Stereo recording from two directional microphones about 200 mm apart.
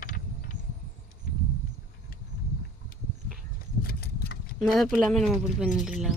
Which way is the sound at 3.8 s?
50° left (ahead or behind).